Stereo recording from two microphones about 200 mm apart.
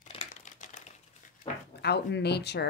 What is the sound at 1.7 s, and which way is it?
Speech, 55° left (ahead or behind).